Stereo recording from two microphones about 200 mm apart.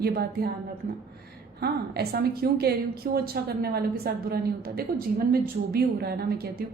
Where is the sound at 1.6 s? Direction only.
50° right (ahead or behind).